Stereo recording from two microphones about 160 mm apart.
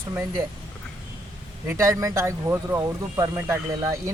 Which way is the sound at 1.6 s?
20° right (ahead or behind).